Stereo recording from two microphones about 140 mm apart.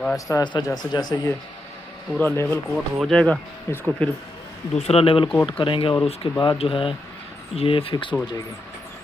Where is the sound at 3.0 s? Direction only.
5° left (ahead or behind).